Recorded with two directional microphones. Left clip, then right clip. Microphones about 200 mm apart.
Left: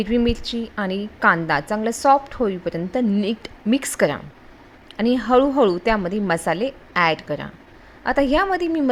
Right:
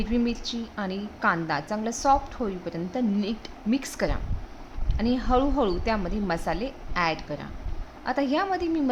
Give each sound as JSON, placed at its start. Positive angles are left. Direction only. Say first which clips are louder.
{"t": 0.0, "sound": "a woman's voice", "louder": "left 7 dB", "side_deg": 30}